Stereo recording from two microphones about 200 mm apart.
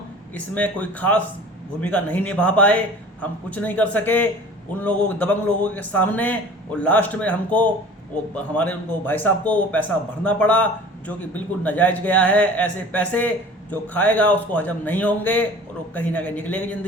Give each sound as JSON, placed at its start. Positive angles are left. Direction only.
{"t": 0.3, "sound": "a man's voice", "side_deg": 5}